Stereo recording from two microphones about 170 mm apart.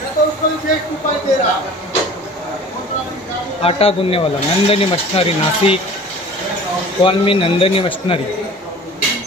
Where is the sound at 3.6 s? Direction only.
35° left (ahead or behind).